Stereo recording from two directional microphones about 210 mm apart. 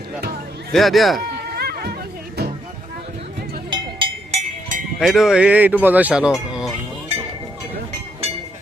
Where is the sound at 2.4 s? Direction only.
50° right (ahead or behind).